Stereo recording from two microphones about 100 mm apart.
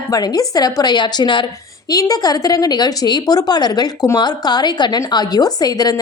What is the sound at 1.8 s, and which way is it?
A woman's voice, 40° left (ahead or behind).